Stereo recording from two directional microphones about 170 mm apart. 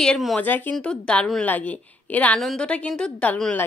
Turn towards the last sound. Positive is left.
turn(degrees=10)  # may be behind; listen again after turning